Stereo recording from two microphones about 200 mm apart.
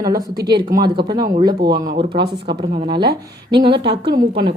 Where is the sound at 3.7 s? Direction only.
55° right (ahead or behind).